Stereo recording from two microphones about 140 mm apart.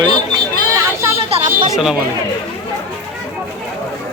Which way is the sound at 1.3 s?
45° right (ahead or behind).